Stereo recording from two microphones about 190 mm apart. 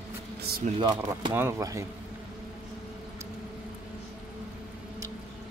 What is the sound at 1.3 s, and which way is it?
Speech, 15° right (ahead or behind).